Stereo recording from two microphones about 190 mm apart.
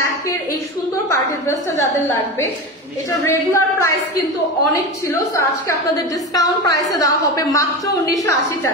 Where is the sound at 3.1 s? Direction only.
15° left (ahead or behind).